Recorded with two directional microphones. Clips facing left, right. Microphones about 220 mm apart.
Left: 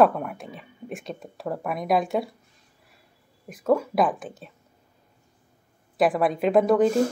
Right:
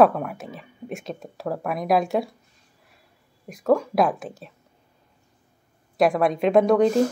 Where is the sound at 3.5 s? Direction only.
Centre (ahead or behind).